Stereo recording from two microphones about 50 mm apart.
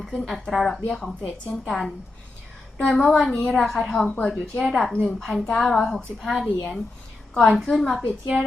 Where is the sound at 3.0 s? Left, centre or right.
Centre.